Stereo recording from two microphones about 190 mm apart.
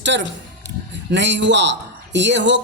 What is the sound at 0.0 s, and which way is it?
A woman's voice, 70° right (ahead or behind).